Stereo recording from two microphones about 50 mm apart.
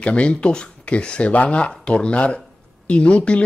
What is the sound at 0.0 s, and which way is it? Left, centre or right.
Speech, left.